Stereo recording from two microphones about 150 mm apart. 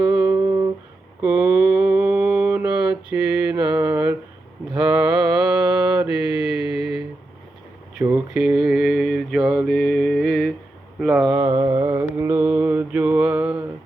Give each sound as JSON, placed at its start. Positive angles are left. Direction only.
{"t": 0.0, "sound": "humming", "side_deg": -10}
{"t": 1.2, "sound": "mantra", "side_deg": -10}
{"t": 3.7, "sound": "mantra", "side_deg": -20}
{"t": 6.7, "sound": "a sound", "side_deg": -5}
{"t": 7.9, "sound": "mantra", "side_deg": -10}
{"t": 11.3, "sound": "a sound", "side_deg": -25}
{"t": 11.9, "sound": "mantra", "side_deg": -15}